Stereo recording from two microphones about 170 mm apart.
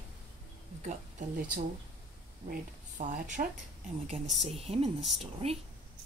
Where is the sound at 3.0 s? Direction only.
50° right (ahead or behind).